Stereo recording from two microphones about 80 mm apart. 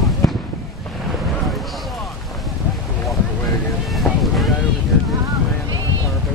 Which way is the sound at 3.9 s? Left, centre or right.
Centre.